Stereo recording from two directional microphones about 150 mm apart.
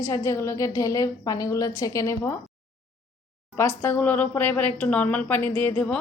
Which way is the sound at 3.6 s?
15° left (ahead or behind).